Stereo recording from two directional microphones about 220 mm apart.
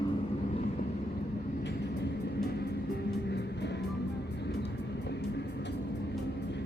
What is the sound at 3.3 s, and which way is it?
Music, 50° left (ahead or behind).